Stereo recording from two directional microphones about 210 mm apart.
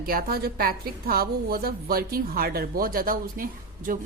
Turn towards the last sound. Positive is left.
turn(degrees=-40)  # may be behind; listen again after turning